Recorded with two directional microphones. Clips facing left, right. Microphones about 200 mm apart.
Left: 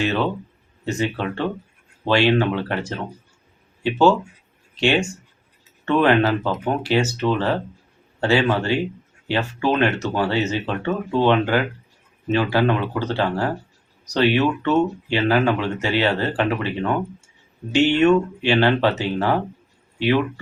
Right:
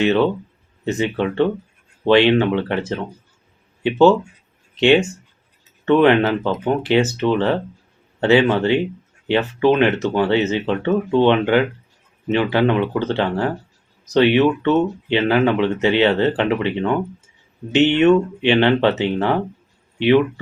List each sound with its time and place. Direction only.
0.9 s speech: 20° right (ahead or behind)